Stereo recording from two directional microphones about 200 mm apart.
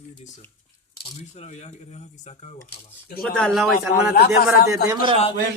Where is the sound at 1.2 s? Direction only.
35° left (ahead or behind).